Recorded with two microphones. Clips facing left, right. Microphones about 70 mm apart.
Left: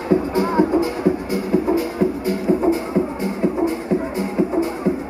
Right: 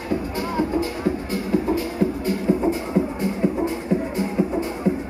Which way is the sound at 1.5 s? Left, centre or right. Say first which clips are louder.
Left 3 dB; centre.